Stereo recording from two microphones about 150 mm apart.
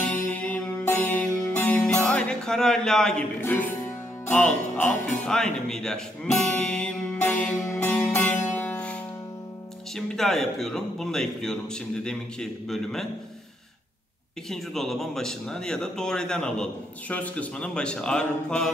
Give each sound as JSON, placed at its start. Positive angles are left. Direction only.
{"t": 0.0, "sound": "music", "side_deg": 10}
{"t": 5.2, "sound": "speech", "side_deg": 5}
{"t": 7.6, "sound": "music", "side_deg": 20}
{"t": 7.9, "sound": "music", "side_deg": 10}
{"t": 9.9, "sound": "speech", "side_deg": 0}
{"t": 14.5, "sound": "speech", "side_deg": 0}